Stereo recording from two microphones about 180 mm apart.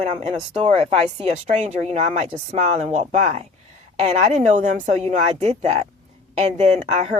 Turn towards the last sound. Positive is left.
turn(degrees=-35)  # may be behind; listen again after turning